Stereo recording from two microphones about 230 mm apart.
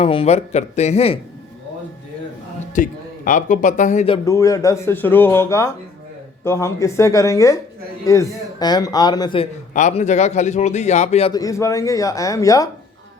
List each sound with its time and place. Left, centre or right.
0.0 s a man's voice: left
2.7 s speech: left
4.3 s a man's voice: centre; by 11.3 s left
11.3 s speech: centre